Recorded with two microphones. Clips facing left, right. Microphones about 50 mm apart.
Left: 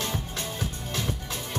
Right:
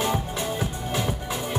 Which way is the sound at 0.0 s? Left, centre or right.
Centre.